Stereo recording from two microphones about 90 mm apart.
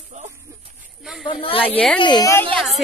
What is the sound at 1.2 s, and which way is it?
Speech, 90° left.